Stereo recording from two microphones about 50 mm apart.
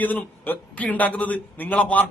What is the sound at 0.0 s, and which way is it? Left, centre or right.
A man's voice, left.